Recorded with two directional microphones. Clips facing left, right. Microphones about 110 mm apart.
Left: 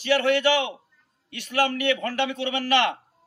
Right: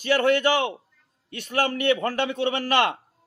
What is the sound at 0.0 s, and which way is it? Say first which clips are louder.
A man's voice: right 1 dB; 40° right (ahead or behind).